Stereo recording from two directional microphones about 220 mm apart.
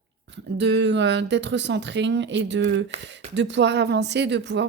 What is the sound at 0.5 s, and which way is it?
Speech, 50° right (ahead or behind).